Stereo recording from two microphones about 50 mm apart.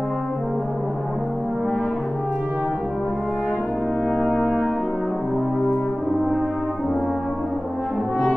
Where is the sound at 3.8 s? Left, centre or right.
Centre.